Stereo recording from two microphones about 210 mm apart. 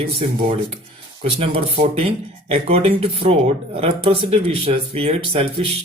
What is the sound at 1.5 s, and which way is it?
Speech, 40° right (ahead or behind).